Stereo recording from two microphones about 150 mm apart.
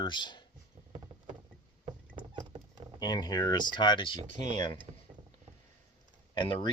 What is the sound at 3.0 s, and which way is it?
Speech, 25° left (ahead or behind).